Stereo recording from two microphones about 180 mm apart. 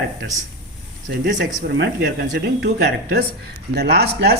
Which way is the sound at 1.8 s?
65° right (ahead or behind).